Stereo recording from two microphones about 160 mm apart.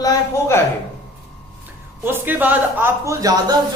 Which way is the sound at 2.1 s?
10° right (ahead or behind).